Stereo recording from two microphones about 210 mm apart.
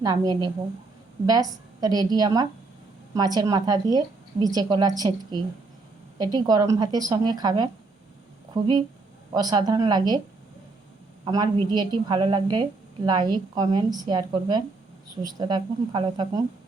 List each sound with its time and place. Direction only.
0.0 s a woman's voice: 20° right (ahead or behind)
11.3 s a woman's voice: 20° right (ahead or behind)